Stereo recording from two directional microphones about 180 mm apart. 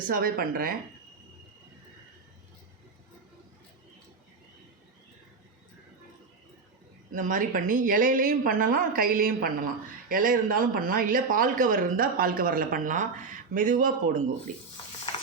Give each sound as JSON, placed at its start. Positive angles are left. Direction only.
{"t": 0.1, "sound": "speech", "side_deg": -55}
{"t": 7.1, "sound": "speech", "side_deg": -45}